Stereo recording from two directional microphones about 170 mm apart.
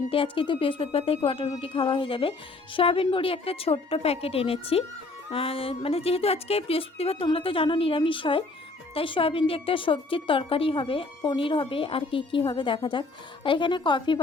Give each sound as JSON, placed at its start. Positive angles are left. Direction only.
{"t": 0.1, "sound": "a woman's voice", "side_deg": 30}